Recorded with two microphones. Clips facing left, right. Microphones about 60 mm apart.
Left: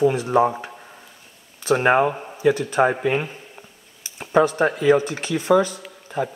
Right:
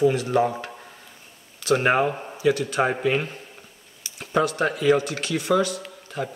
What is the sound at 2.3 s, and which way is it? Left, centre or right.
Speech, left.